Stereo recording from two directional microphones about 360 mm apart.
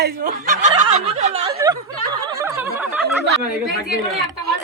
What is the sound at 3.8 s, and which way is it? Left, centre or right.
Speech, centre.